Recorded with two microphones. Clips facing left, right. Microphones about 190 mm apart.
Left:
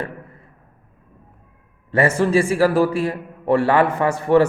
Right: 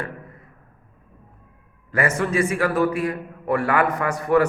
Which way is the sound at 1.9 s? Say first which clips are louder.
Left 5 dB; 30° left (ahead or behind).